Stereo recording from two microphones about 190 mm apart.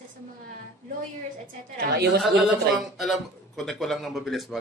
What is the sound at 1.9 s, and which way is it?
Speech, 60° right (ahead or behind).